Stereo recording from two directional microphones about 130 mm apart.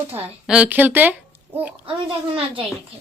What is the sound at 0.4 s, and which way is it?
Speech, 5° right (ahead or behind).